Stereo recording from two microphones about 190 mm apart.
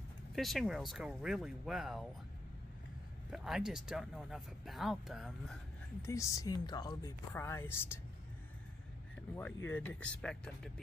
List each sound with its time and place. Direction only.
0.4 s speech: centre (ahead or behind)
3.3 s speech: centre (ahead or behind)
6.0 s speech: 15° left (ahead or behind)
9.7 s speech: 10° left (ahead or behind)